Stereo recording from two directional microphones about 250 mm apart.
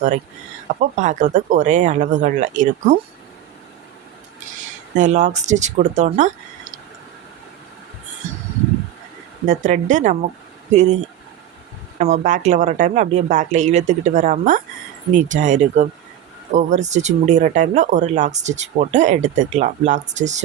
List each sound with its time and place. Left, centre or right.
0.8 s speech: right
4.9 s speech: right
8.2 s a sound: right
9.5 s speech: right